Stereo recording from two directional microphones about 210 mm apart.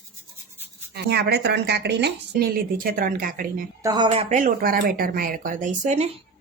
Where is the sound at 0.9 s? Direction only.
50° right (ahead or behind).